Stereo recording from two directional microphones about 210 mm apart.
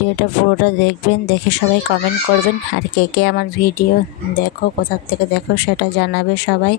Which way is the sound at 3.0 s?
50° left (ahead or behind).